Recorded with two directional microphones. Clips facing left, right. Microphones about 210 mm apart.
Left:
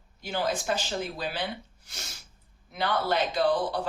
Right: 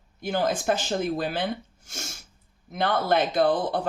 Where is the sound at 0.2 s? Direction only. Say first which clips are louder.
Right 4 dB; 50° right (ahead or behind).